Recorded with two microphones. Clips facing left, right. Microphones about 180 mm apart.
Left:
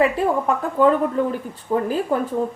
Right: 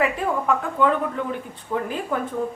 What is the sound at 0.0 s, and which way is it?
Speech, 35° left (ahead or behind).